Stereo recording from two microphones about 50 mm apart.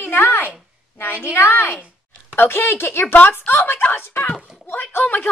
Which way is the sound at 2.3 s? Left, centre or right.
Left.